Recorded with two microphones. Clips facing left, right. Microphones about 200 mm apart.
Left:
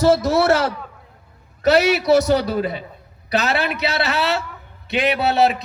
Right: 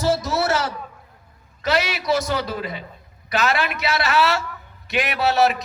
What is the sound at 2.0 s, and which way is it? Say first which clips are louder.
Speech: left 7 dB; 65° left (ahead or behind).